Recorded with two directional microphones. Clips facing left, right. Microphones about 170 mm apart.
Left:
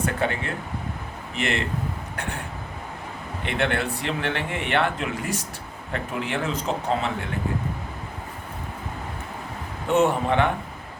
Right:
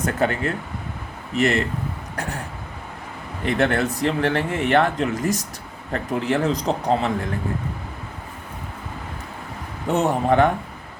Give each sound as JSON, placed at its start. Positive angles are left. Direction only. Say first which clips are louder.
{"t": 0.0, "sound": "a man's voice", "louder": "right 4 dB", "side_deg": -40}
{"t": 3.4, "sound": "a man's voice", "louder": "right 5 dB", "side_deg": -40}
{"t": 9.9, "sound": "a man's voice", "louder": "right 1 dB", "side_deg": -40}